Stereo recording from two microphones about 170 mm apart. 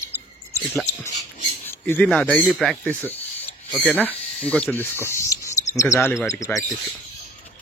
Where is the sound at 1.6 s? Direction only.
10° left (ahead or behind).